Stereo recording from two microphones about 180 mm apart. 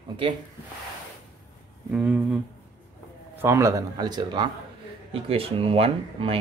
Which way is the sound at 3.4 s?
15° right (ahead or behind).